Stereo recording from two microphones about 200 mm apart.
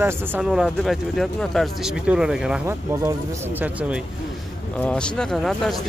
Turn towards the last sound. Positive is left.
turn(degrees=0)  # may be behind; listen again after turning